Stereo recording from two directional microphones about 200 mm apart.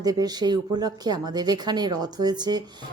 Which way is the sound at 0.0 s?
20° right (ahead or behind).